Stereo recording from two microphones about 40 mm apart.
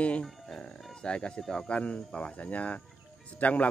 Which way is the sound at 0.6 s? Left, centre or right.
Left.